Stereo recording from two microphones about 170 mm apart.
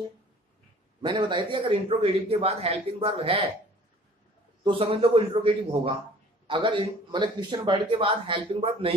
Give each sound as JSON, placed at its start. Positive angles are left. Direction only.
{"t": 1.0, "sound": "a man's voice", "side_deg": -25}
{"t": 4.6, "sound": "a man's voice", "side_deg": -35}